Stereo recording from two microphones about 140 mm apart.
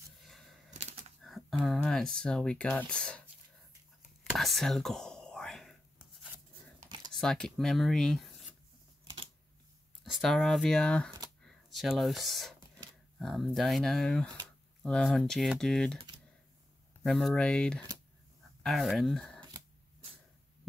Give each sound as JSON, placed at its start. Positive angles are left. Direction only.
{"t": 0.2, "sound": "a sound", "side_deg": 0}
{"t": 0.7, "sound": "bird flight", "side_deg": -55}
{"t": 1.2, "sound": "speech", "side_deg": 0}
{"t": 4.2, "sound": "whispering", "side_deg": 0}
{"t": 7.1, "sound": "speech", "side_deg": 5}
{"t": 10.0, "sound": "speech", "side_deg": 5}
{"t": 11.4, "sound": "a sound", "side_deg": 0}
{"t": 13.2, "sound": "speech", "side_deg": 0}
{"t": 17.0, "sound": "speech", "side_deg": 5}